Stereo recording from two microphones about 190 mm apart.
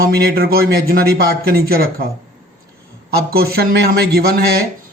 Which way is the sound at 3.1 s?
55° right (ahead or behind).